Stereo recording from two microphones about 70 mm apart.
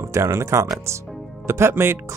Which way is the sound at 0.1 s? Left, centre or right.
Right.